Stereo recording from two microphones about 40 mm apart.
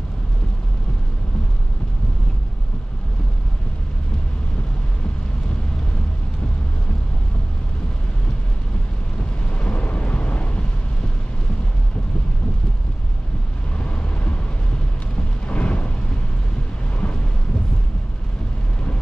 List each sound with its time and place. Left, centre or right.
9.5 s vehicle: left
13.7 s vehicle: left
15.4 s a sound: left
17.0 s thunder: left